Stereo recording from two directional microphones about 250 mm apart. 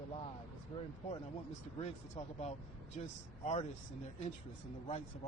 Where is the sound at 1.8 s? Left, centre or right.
Left.